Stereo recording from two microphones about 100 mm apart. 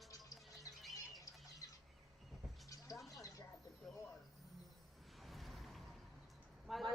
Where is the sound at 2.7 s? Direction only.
35° left (ahead or behind).